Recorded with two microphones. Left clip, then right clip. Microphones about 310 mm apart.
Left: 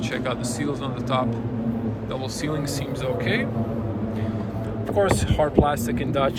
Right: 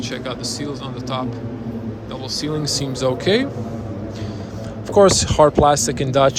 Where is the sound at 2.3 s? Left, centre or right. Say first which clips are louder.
Right 10 dB; centre.